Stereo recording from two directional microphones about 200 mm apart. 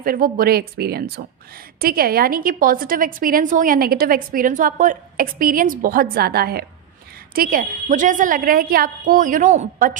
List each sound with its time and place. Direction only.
0.0 s a woman's voice: 45° right (ahead or behind)